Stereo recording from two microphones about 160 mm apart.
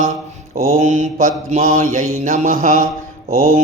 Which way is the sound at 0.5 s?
45° right (ahead or behind).